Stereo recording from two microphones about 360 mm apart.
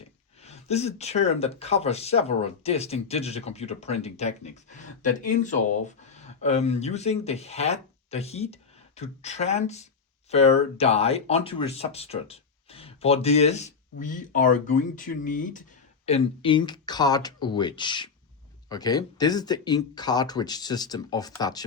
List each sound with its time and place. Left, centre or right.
0.4 s speech: centre